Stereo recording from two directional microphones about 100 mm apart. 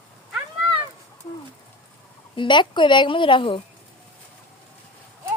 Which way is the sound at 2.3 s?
50° left (ahead or behind).